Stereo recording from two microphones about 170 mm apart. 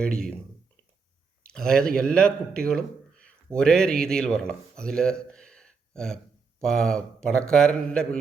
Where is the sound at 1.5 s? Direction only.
5° left (ahead or behind).